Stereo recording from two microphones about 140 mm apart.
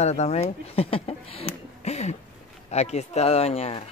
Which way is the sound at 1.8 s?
50° left (ahead or behind).